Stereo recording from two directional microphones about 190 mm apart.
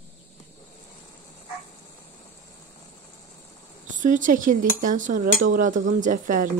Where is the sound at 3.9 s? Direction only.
45° right (ahead or behind).